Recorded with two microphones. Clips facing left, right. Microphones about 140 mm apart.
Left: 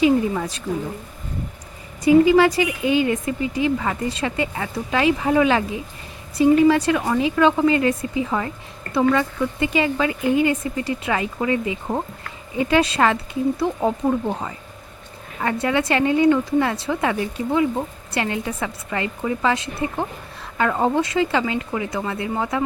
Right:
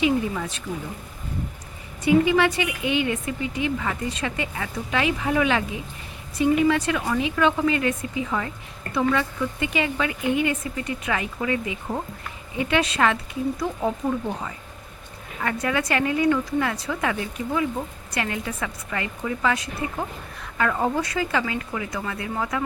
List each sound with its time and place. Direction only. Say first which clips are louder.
0.0 s a sound: left 5 dB; 35° left (ahead or behind)
2.0 s speech: left 5 dB; 35° left (ahead or behind)
15.4 s speech: left 4 dB; 30° left (ahead or behind)